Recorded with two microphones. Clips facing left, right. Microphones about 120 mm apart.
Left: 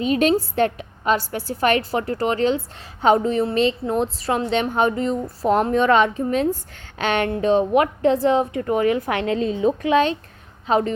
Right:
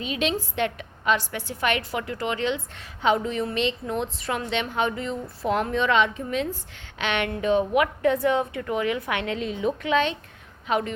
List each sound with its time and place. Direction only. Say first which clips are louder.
0.0 s a woman's voice: left 9 dB; 45° left (ahead or behind)